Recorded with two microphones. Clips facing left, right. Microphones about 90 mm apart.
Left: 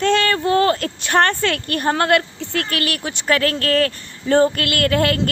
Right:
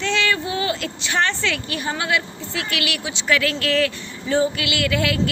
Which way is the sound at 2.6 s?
40° left (ahead or behind).